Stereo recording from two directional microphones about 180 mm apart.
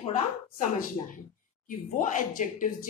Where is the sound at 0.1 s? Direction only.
45° left (ahead or behind).